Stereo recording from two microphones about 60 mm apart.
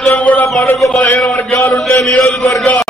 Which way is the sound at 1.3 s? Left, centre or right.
Left.